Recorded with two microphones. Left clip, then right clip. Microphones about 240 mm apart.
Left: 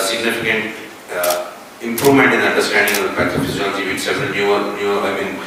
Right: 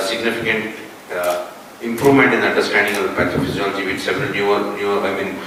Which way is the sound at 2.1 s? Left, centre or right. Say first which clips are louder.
Left 1 dB; centre.